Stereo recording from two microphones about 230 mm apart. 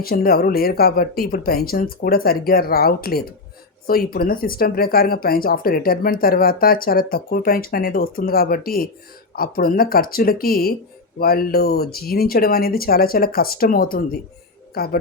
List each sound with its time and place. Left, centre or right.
0.0 s speech: left